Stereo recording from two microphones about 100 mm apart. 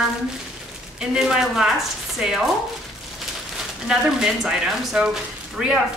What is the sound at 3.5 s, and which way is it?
Speech, 5° right (ahead or behind).